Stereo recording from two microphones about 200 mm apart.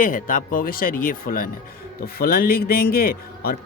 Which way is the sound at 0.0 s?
40° left (ahead or behind).